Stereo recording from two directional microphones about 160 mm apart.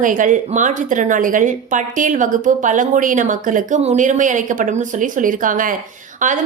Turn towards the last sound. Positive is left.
turn(degrees=-55)  # may be behind; listen again after turning